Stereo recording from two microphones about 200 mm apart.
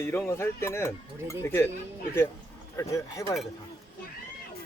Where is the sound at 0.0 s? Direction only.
10° left (ahead or behind).